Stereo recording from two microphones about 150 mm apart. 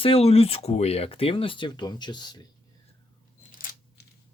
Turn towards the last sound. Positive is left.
turn(degrees=70)  # may be behind; listen again after turning